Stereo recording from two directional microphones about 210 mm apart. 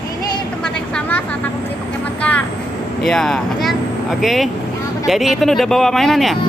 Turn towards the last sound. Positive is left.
turn(degrees=0)  # may be behind; listen again after turning